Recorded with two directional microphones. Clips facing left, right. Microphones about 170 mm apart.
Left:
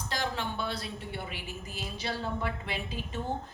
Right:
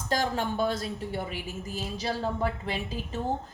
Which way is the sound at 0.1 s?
45° right (ahead or behind).